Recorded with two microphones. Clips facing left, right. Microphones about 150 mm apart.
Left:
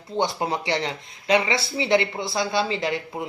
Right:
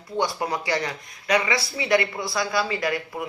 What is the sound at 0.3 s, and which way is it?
Speech, 25° left (ahead or behind).